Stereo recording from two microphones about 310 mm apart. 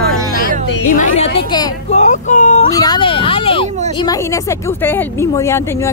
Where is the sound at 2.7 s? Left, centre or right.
Centre.